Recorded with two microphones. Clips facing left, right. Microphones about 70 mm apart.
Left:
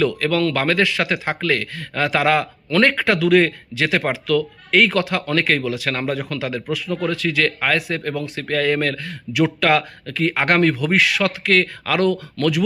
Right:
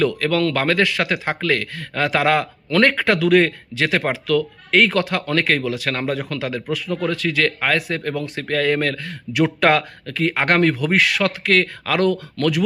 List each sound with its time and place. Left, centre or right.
0.1 s a man's voice: right